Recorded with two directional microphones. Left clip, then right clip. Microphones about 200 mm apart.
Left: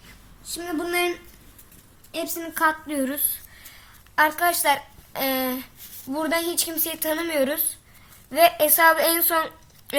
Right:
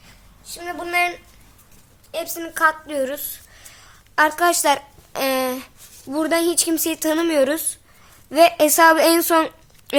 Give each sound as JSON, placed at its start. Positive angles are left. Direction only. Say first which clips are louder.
{"t": 0.4, "sound": "a woman's voice", "louder": "even", "side_deg": -50}